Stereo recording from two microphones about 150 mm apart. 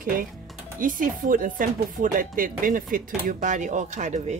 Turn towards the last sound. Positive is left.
turn(degrees=-50)  # may be behind; listen again after turning